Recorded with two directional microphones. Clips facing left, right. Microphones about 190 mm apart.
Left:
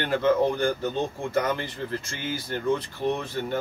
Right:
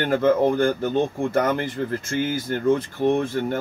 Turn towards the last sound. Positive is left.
turn(degrees=-50)  # may be behind; listen again after turning